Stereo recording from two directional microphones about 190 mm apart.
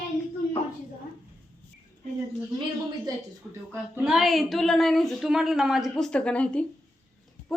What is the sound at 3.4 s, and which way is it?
Speech, 5° right (ahead or behind).